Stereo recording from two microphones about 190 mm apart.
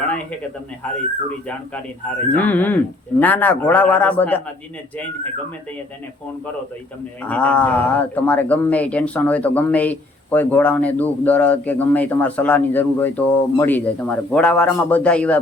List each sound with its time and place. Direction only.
2.3 s speech: 10° left (ahead or behind)
7.3 s speech: 10° left (ahead or behind)